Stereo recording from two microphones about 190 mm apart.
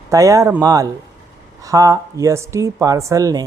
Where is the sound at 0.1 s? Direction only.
20° right (ahead or behind).